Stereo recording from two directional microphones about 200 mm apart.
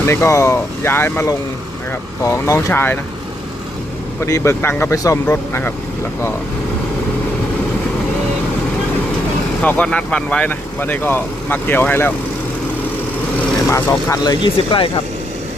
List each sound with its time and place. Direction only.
0.0 s speech: 15° left (ahead or behind)
4.3 s speech: 15° left (ahead or behind)
9.6 s speech: 5° left (ahead or behind)
13.7 s speech: 15° left (ahead or behind)